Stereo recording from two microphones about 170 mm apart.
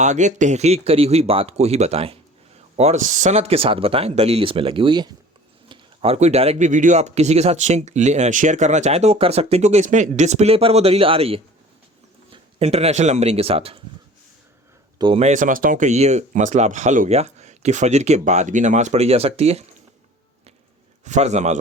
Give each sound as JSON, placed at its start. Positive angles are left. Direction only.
{"t": 0.0, "sound": "speech", "side_deg": -45}
{"t": 14.9, "sound": "speech", "side_deg": -30}
{"t": 15.2, "sound": "speech", "side_deg": -50}
{"t": 21.0, "sound": "speech", "side_deg": -45}